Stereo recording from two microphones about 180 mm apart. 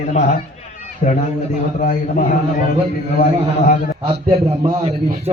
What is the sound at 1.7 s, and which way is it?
A man's voice, 50° left (ahead or behind).